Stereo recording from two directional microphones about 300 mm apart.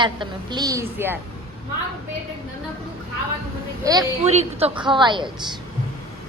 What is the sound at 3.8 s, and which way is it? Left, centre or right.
A woman's voice, centre.